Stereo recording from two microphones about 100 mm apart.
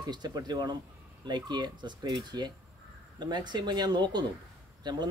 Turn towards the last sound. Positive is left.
turn(degrees=-45)  # may be behind; listen again after turning